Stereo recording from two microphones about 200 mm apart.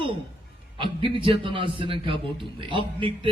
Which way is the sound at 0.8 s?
25° right (ahead or behind).